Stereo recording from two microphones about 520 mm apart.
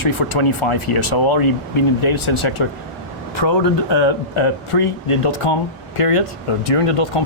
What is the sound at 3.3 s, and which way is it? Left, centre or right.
Speech, left.